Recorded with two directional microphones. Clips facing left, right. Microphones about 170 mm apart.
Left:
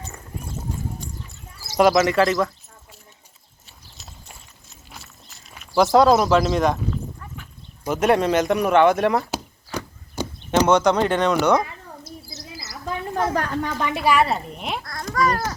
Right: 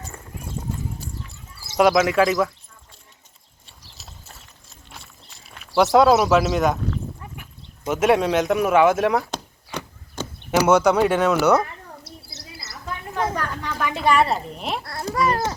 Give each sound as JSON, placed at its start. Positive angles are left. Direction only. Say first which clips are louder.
{"t": 1.7, "sound": "a woman's voice", "louder": "even", "side_deg": 0}
{"t": 3.7, "sound": "clip-clop", "louder": "even", "side_deg": 0}
{"t": 4.7, "sound": "a sound", "louder": "left 1 dB", "side_deg": 0}
{"t": 7.9, "sound": "speech", "louder": "even", "side_deg": 0}
{"t": 10.6, "sound": "speech", "louder": "right 1 dB", "side_deg": -10}
{"t": 12.3, "sound": "bird", "louder": "left 3 dB", "side_deg": -65}
{"t": 13.3, "sound": "a sound", "louder": "left 4 dB", "side_deg": 50}
{"t": 13.7, "sound": "a woman's voice", "louder": "left 1 dB", "side_deg": 20}
{"t": 14.0, "sound": "a woman's voice", "louder": "right 1 dB", "side_deg": 5}
{"t": 14.8, "sound": "a child's voice", "louder": "even", "side_deg": -30}